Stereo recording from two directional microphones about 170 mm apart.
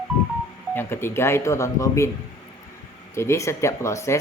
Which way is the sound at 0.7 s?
15° left (ahead or behind).